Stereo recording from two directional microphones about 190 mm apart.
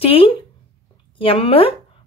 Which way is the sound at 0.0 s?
30° left (ahead or behind).